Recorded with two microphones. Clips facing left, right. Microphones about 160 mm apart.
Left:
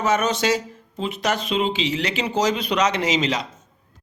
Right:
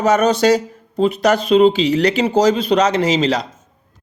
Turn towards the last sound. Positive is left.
turn(degrees=-35)  # may be behind; listen again after turning